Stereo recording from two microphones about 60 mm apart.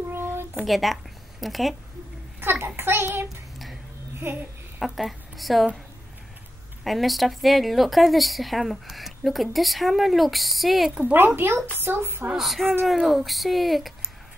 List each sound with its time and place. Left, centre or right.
0.1 s a sound: right
0.7 s speech: centre
2.4 s a woman's voice: right
3.3 s child singing: centre
4.9 s a woman's voice: centre
6.8 s speech: centre
11.1 s a woman's voice: right
12.4 s speech: centre